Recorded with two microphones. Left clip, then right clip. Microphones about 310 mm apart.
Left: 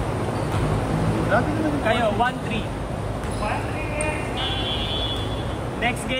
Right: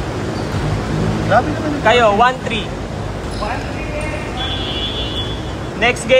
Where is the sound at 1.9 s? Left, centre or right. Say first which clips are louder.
Right 12 dB; centre.